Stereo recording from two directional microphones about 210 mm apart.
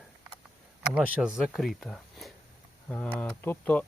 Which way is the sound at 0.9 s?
5° right (ahead or behind).